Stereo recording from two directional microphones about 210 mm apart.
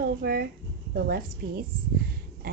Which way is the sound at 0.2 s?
45° right (ahead or behind).